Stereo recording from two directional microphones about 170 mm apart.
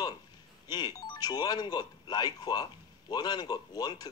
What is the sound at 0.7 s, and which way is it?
Speech, 25° left (ahead or behind).